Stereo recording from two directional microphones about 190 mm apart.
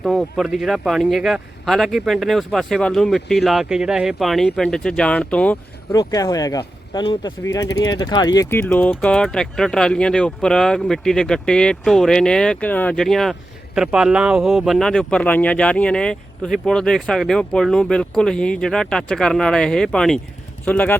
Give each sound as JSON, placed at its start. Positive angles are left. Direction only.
{"t": 0.0, "sound": "speech", "side_deg": 0}
{"t": 5.9, "sound": "speech", "side_deg": 20}